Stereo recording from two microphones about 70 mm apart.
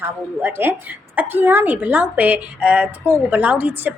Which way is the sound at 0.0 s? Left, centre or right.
Right.